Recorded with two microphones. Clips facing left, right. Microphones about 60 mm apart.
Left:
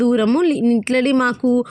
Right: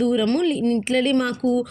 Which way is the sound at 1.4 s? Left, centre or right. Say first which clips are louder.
Left 4 dB; left.